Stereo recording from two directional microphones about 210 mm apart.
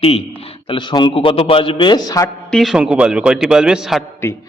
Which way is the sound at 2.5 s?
Centre (ahead or behind).